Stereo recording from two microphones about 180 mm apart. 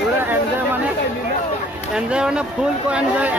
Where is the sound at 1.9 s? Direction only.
5° right (ahead or behind).